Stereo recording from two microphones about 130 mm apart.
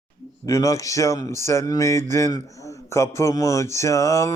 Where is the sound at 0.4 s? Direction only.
25° left (ahead or behind).